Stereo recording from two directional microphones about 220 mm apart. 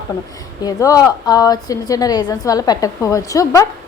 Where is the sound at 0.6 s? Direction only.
15° left (ahead or behind).